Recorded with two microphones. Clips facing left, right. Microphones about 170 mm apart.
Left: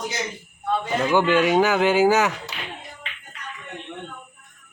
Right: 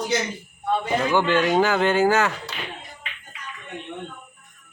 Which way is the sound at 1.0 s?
10° left (ahead or behind).